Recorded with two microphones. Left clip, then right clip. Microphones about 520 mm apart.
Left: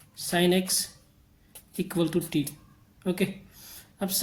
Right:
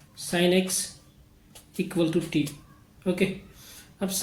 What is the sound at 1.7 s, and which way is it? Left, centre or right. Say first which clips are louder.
Speech: right 2 dB; left.